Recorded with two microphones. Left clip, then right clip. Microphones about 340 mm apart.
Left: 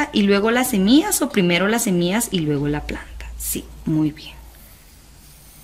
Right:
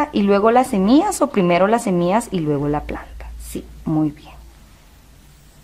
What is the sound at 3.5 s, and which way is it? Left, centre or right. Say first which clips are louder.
Speech: right 2 dB; right.